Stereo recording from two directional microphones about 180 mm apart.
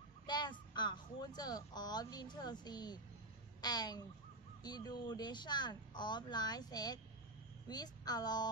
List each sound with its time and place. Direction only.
0.3 s speech: 25° left (ahead or behind)